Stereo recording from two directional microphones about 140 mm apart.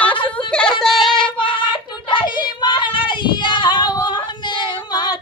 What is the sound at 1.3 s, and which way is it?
Child singing, 35° left (ahead or behind).